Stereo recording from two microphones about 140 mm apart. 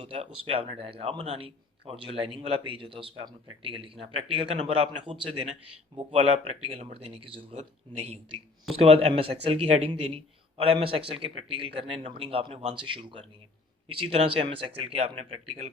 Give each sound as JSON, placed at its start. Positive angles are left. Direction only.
{"t": 0.0, "sound": "speech", "side_deg": -40}